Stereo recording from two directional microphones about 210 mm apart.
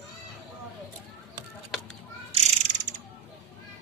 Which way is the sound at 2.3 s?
35° right (ahead or behind).